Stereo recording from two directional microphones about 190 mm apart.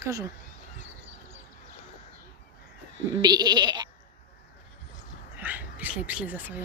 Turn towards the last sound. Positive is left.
turn(degrees=-10)  # may be behind; listen again after turning